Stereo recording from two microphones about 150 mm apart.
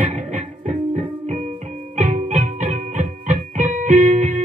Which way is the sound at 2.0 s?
60° right (ahead or behind).